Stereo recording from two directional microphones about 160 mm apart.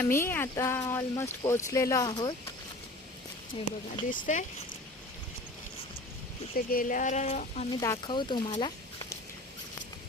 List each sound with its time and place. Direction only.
0.0 s speech: 15° left (ahead or behind)
3.5 s speech: 30° left (ahead or behind)
4.3 s speech: 45° left (ahead or behind)
6.7 s speech: 60° left (ahead or behind)
7.7 s speech: 25° left (ahead or behind)